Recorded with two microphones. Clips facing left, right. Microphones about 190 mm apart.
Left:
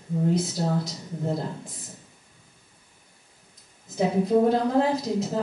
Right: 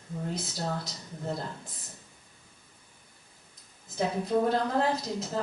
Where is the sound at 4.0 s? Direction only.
10° left (ahead or behind).